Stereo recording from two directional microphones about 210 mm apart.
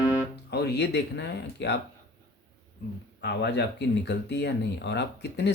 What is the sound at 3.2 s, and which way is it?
Speech, 55° left (ahead or behind).